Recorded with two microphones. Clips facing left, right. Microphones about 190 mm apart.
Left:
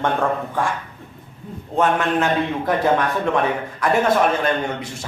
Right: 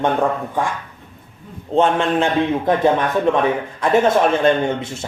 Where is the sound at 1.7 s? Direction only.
25° right (ahead or behind).